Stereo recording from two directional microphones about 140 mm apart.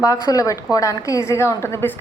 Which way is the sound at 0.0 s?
25° left (ahead or behind).